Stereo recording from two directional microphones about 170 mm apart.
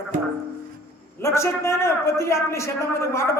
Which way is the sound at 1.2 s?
15° left (ahead or behind).